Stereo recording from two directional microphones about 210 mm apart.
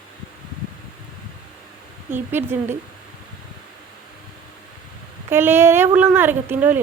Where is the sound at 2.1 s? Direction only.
10° right (ahead or behind).